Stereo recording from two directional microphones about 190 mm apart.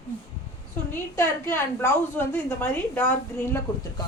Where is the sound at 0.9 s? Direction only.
10° left (ahead or behind).